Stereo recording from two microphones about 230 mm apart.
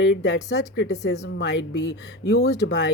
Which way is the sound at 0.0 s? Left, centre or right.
Left.